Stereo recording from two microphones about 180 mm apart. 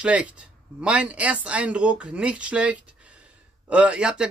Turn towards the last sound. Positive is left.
turn(degrees=-5)  # may be behind; listen again after turning